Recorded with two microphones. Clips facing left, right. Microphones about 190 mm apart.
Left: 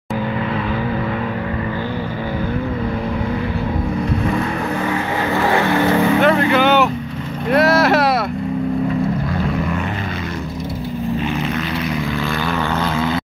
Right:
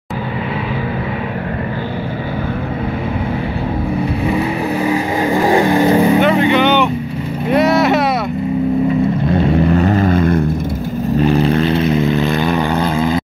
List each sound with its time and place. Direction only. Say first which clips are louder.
4.8 s vehicle: right 4 dB; 15° right (ahead or behind)
6.2 s vehicle: right 2 dB; centre (ahead or behind)
9.5 s vehicle: right 8 dB; 35° right (ahead or behind); by 10.4 s 50° right (ahead or behind)
11.1 s vehicle: right 8 dB; 35° right (ahead or behind); by 13.2 s 15° right (ahead or behind)